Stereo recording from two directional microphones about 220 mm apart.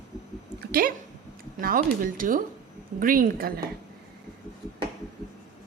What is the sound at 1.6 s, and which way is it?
Speech, 40° right (ahead or behind).